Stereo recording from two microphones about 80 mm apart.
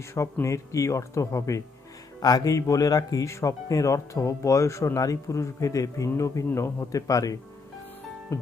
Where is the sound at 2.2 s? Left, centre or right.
Left.